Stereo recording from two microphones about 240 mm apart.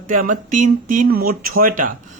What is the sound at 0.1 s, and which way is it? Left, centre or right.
Speech, right.